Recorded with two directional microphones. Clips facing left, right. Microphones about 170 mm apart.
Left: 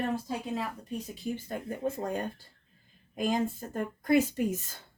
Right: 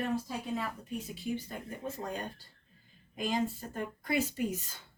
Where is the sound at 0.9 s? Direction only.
45° left (ahead or behind).